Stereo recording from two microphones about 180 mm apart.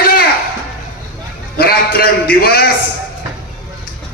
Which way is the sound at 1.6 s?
60° left (ahead or behind).